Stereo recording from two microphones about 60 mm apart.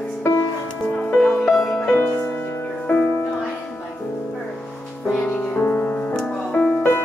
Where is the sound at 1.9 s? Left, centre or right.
Left.